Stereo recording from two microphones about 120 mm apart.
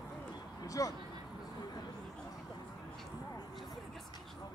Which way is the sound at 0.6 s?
30° left (ahead or behind).